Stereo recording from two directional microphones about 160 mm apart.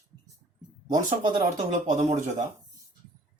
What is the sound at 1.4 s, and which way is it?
Speech, 55° right (ahead or behind).